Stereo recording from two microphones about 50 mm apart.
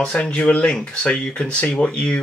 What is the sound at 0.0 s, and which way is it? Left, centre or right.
Speech, left.